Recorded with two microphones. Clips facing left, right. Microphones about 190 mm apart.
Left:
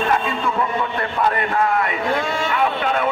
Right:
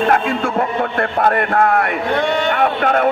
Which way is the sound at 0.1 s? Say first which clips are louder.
Right 4 dB; 60° right (ahead or behind).